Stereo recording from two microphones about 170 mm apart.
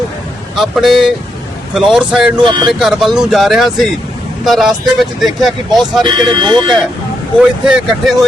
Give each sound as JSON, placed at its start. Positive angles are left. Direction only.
{"t": 0.5, "sound": "speech", "side_deg": 0}
{"t": 2.4, "sound": "speech", "side_deg": -25}
{"t": 2.7, "sound": "speech", "side_deg": 0}
{"t": 6.0, "sound": "speech", "side_deg": -25}
{"t": 7.6, "sound": "speech", "side_deg": -5}